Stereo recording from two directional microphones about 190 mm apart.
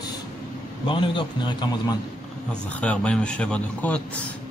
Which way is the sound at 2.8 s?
5° left (ahead or behind).